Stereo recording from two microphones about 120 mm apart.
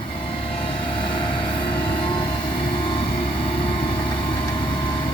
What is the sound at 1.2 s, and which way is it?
Vehicle, 45° left (ahead or behind).